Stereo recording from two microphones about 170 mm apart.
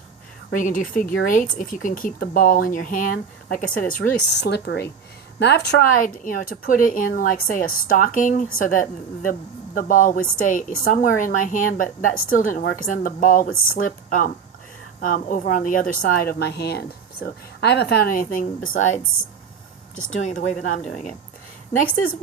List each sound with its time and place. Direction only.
0.5 s a woman's voice: 50° left (ahead or behind)
4.4 s a woman's voice: 80° left; by 21.2 s 45° left (ahead or behind)